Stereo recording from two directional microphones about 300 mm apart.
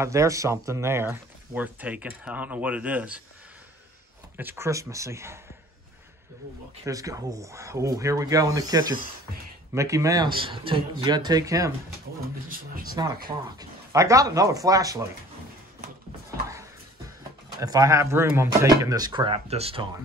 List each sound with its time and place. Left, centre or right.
0.0 s speech: centre
4.4 s speech: centre
6.8 s speech: centre
12.4 s speech: right
13.6 s speech: centre
17.5 s speech: centre